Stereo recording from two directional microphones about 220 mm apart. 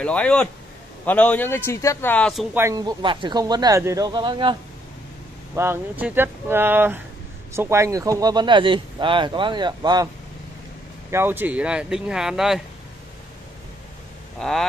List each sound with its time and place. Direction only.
0.0 s a man's voice: 5° left (ahead or behind)
2.5 s speech: 15° right (ahead or behind)
5.6 s speech: 10° right (ahead or behind)
11.1 s speech: 10° right (ahead or behind)
14.4 s speech: centre (ahead or behind)